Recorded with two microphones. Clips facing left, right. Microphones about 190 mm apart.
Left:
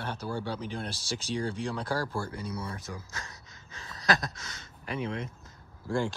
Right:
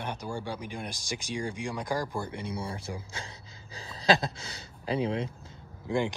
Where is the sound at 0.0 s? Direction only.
15° right (ahead or behind); by 5.5 s 30° right (ahead or behind).